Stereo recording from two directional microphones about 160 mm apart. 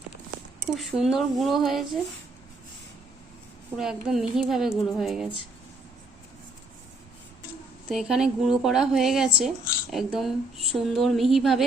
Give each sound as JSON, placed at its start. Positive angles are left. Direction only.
{"t": 0.8, "sound": "a woman's voice", "side_deg": 0}
{"t": 3.8, "sound": "a woman's voice", "side_deg": -5}
{"t": 7.9, "sound": "a woman's voice", "side_deg": 0}